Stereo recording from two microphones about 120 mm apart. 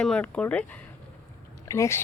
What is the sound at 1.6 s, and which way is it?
Speech, 25° left (ahead or behind).